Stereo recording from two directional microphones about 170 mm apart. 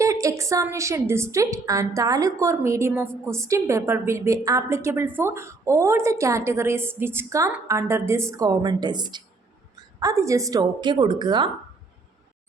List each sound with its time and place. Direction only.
0.0 s a woman's voice: 20° right (ahead or behind)